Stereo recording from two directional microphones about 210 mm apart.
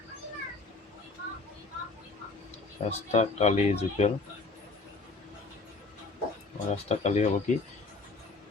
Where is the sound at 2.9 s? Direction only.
30° left (ahead or behind).